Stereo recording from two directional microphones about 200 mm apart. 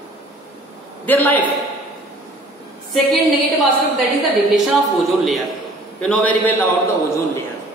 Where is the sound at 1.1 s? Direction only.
10° left (ahead or behind).